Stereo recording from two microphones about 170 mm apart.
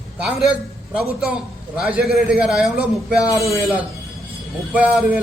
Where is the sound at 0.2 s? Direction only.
5° right (ahead or behind).